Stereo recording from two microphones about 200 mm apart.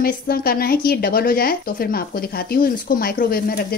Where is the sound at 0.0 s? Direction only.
50° left (ahead or behind).